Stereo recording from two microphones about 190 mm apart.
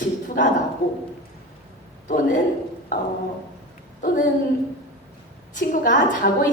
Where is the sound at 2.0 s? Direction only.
40° left (ahead or behind).